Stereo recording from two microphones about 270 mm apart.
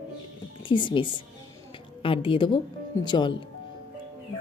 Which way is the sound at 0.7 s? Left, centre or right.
Centre.